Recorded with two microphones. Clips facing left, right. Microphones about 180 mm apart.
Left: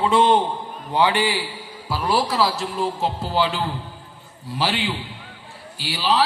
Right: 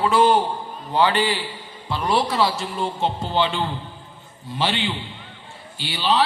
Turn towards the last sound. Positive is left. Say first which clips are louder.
# even
turn(degrees=5)  # may be behind; listen again after turning